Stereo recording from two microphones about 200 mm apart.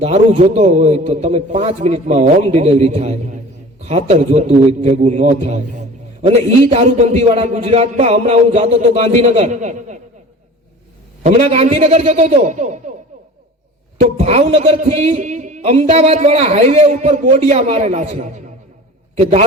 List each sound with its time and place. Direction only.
0.0 s speech: 35° right (ahead or behind)
11.2 s speech: 35° right (ahead or behind)
14.0 s speech: 35° right (ahead or behind)